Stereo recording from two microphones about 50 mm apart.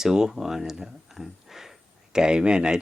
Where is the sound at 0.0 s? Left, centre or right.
Centre.